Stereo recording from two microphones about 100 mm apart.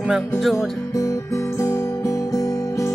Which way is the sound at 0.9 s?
35° left (ahead or behind).